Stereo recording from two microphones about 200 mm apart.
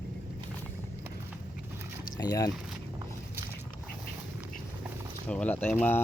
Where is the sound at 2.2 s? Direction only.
20° left (ahead or behind).